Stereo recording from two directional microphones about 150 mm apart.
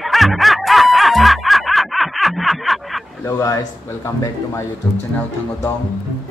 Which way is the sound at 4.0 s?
20° left (ahead or behind).